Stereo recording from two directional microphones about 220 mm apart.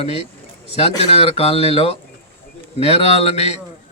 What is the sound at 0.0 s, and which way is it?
A man's voice, 25° left (ahead or behind).